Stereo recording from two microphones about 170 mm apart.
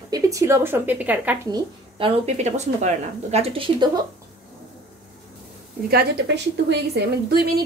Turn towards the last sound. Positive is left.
turn(degrees=-70)  # may be behind; listen again after turning